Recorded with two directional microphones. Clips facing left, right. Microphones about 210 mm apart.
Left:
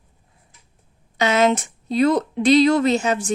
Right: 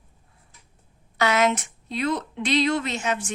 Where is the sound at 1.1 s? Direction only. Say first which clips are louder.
Left 4 dB; 25° left (ahead or behind).